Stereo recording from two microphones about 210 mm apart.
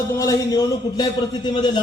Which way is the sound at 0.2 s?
15° left (ahead or behind).